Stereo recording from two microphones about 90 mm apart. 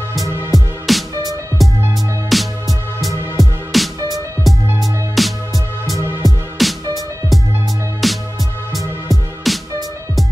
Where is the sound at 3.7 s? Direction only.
Centre (ahead or behind).